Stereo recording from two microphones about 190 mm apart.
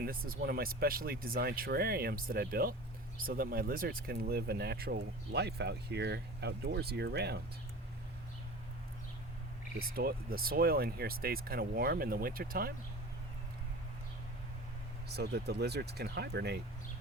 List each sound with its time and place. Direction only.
0.0 s speech: 50° right (ahead or behind)
9.7 s speech: 55° right (ahead or behind)
15.1 s speech: 60° right (ahead or behind)